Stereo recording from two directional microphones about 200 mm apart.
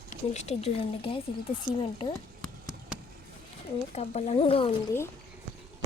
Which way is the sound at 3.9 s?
35° left (ahead or behind).